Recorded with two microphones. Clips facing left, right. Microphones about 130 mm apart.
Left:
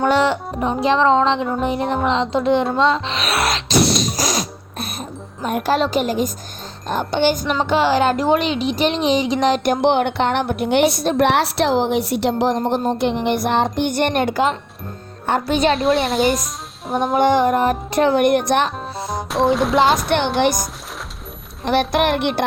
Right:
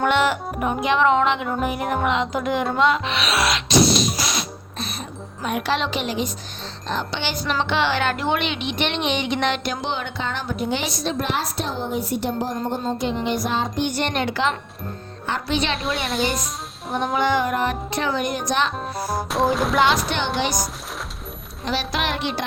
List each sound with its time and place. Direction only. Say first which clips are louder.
0.1 s music: left 3 dB; 30° left (ahead or behind)
2.0 s speech: left 7 dB; 30° left (ahead or behind)
2.7 s music: left 2 dB; 30° left (ahead or behind)
3.2 s music: left 2 dB; 55° left (ahead or behind)
4.2 s music: left 5 dB; 40° left (ahead or behind)
5.5 s speech: left 5 dB; 45° left (ahead or behind)
9.6 s a woman's voice: left 11 dB; 60° left (ahead or behind)
15.7 s speech: left 8 dB; centre (ahead or behind)
17.2 s speech: left 6 dB; 50° left (ahead or behind)
19.0 s music: left 3 dB; centre (ahead or behind)
20.1 s music: left 7 dB; 55° left (ahead or behind)
21.6 s music: left 8 dB; 55° left (ahead or behind)